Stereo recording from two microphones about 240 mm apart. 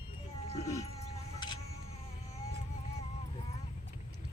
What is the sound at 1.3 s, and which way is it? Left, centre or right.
Music, centre.